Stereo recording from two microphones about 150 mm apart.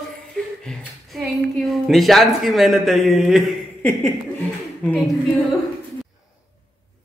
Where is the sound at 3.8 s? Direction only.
15° left (ahead or behind).